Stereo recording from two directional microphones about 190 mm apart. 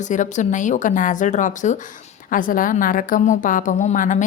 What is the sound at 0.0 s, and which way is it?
A woman's voice, 40° left (ahead or behind).